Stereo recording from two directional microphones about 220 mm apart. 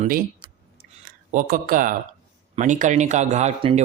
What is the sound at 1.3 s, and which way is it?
Speech, 40° right (ahead or behind).